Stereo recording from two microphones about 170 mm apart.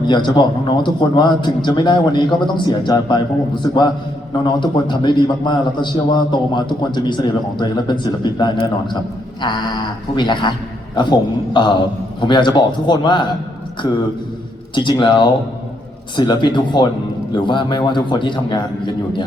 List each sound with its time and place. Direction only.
0.1 s a man's voice: 25° left (ahead or behind)
14.8 s a man's voice: 25° left (ahead or behind)